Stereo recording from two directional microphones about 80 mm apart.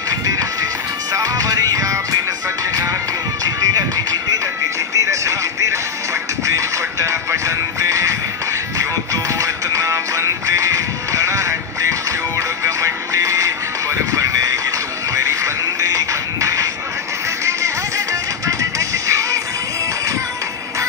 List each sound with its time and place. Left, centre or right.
0.1 s music: right